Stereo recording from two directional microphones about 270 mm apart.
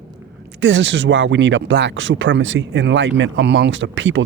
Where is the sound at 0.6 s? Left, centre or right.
Right.